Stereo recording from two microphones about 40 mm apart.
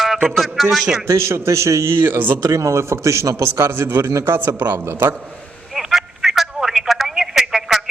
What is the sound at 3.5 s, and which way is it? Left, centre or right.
A man's voice, right.